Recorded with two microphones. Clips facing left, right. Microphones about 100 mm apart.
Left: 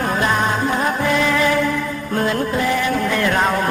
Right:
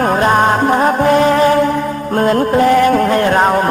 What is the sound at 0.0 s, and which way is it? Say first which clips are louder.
Music: right 7 dB; 45° right (ahead or behind).